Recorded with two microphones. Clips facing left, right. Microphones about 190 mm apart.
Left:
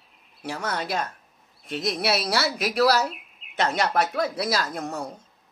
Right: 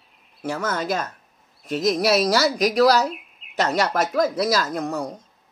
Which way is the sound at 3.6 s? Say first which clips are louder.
Right 2 dB; 40° right (ahead or behind).